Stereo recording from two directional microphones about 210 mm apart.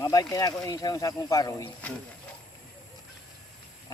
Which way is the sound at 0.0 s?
15° left (ahead or behind).